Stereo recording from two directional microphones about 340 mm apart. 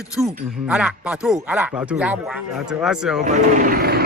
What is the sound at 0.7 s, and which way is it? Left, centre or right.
Speech, centre.